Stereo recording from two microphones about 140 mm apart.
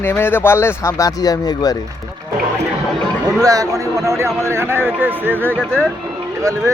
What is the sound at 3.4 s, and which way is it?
A man's voice, 25° right (ahead or behind).